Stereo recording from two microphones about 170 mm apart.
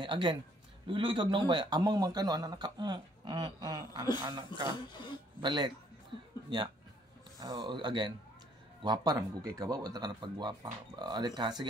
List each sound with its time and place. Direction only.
0.0 s a man's voice: 30° right (ahead or behind)
4.7 s speech: 25° left (ahead or behind)
5.4 s a man's voice: 25° right (ahead or behind)